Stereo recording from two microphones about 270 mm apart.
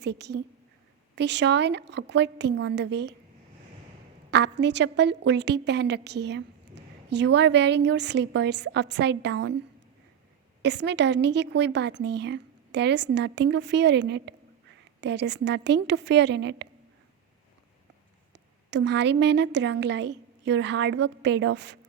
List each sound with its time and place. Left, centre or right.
0.0 s a woman's voice: right
4.3 s a woman's voice: right
10.6 s a woman's voice: right
18.3 s a woman's voice: right